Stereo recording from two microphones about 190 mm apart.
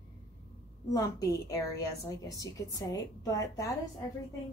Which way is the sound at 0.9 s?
20° left (ahead or behind).